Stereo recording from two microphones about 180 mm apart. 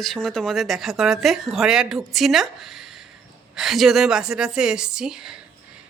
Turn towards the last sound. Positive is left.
turn(degrees=-5)  # may be behind; listen again after turning